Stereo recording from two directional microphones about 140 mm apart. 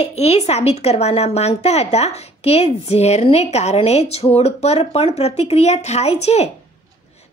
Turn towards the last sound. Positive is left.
turn(degrees=50)  # may be behind; listen again after turning